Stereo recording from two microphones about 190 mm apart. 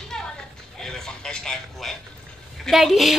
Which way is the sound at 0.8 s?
5° left (ahead or behind).